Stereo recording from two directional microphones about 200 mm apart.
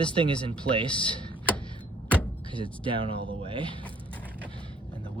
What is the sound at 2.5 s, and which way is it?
Speech, 25° right (ahead or behind).